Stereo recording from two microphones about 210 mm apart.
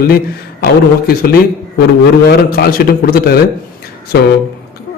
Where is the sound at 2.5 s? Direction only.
45° left (ahead or behind).